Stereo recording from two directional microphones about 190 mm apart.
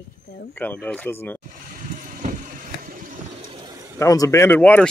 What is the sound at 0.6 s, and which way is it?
Speech, 10° left (ahead or behind).